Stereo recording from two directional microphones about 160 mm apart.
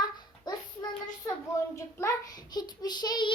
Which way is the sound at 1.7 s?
20° left (ahead or behind).